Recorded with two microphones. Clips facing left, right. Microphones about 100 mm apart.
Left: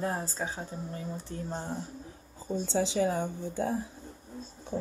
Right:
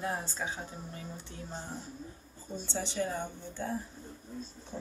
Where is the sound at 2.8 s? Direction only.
90° left.